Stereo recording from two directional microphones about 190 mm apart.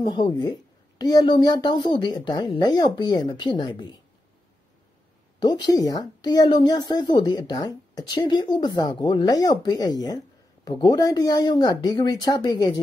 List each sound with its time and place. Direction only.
0.0 s speech: 20° left (ahead or behind)
5.4 s speech: 20° left (ahead or behind)